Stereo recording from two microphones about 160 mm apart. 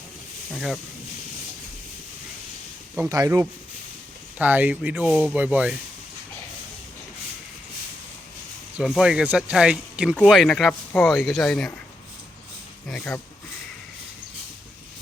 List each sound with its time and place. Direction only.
0.5 s speech: centre (ahead or behind)
3.1 s speech: 20° right (ahead or behind)
8.8 s speech: 5° right (ahead or behind)